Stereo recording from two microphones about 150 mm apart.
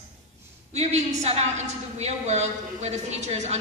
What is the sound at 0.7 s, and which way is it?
A woman's voice, 45° right (ahead or behind).